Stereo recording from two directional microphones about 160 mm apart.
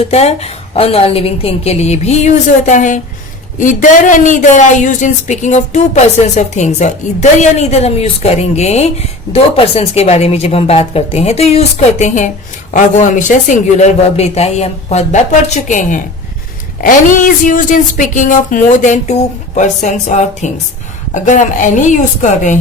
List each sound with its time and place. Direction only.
0.1 s a woman's voice: 40° left (ahead or behind)